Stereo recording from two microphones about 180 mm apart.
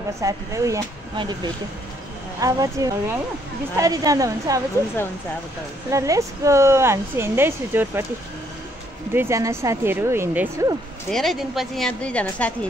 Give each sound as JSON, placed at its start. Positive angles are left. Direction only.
{"t": 0.2, "sound": "speech", "side_deg": -20}
{"t": 5.9, "sound": "a woman's voice", "side_deg": -15}
{"t": 9.1, "sound": "a woman's voice", "side_deg": -15}
{"t": 11.1, "sound": "a woman's voice", "side_deg": 0}